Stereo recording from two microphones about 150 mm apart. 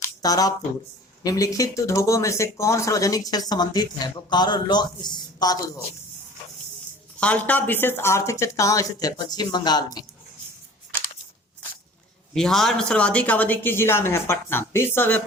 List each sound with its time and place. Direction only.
0.0 s a sound: 25° left (ahead or behind)
1.2 s speech: 25° left (ahead or behind)
7.2 s speech: 10° left (ahead or behind); by 10.1 s 25° left (ahead or behind)
12.3 s speech: centre (ahead or behind)